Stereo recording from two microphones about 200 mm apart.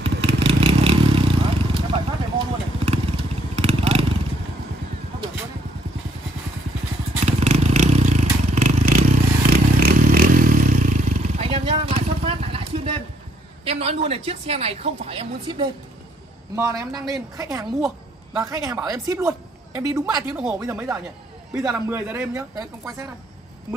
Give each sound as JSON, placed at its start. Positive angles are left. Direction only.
{"t": 0.0, "sound": "vehicle", "side_deg": -30}
{"t": 3.5, "sound": "motorcycle", "side_deg": -30}
{"t": 7.2, "sound": "vehicle", "side_deg": -35}
{"t": 13.7, "sound": "a woman's voice", "side_deg": -30}